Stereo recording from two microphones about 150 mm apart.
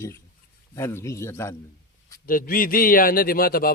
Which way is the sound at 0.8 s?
15° left (ahead or behind).